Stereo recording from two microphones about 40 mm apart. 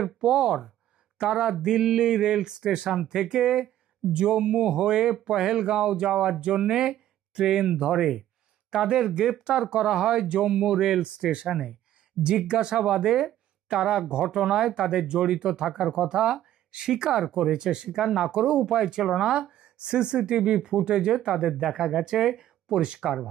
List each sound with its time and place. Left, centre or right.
0.2 s speech: centre
5.6 s speech: right
9.4 s speech: right
11.4 s speech: centre
12.4 s speech: right
18.3 s speech: right
19.5 s speech: right
21.4 s speech: centre